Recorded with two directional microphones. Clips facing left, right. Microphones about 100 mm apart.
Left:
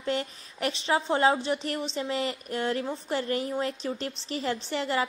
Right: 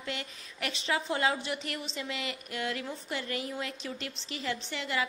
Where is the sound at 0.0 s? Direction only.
35° left (ahead or behind).